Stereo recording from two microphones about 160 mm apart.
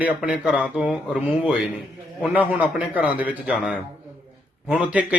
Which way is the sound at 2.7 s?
10° right (ahead or behind).